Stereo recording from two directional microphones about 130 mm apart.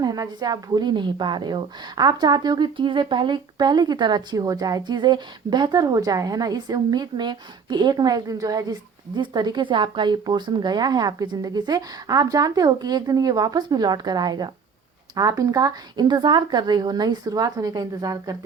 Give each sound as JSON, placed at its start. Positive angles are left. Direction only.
{"t": 0.0, "sound": "a woman's voice", "side_deg": -30}